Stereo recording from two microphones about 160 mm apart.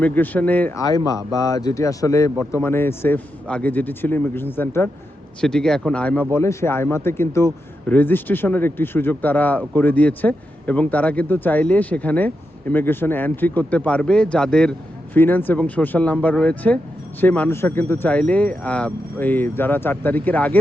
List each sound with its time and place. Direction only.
0.0 s speech: 10° left (ahead or behind)
0.8 s speech: 20° left (ahead or behind)